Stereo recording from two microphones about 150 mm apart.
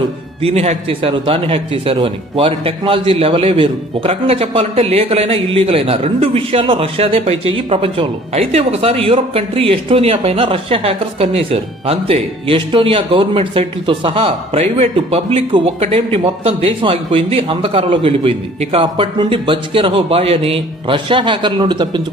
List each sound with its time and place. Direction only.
0.4 s a man's voice: 45° right (ahead or behind)